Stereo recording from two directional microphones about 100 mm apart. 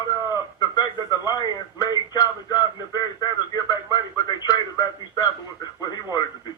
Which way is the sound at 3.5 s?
40° left (ahead or behind).